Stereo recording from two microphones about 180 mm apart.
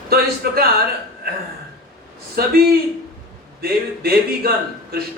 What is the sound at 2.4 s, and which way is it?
Speech, 60° right (ahead or behind).